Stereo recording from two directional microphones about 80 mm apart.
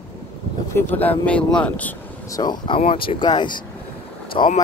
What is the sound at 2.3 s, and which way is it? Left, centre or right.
Speech, left.